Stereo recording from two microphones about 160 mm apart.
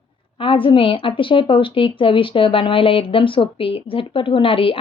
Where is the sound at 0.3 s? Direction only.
35° left (ahead or behind).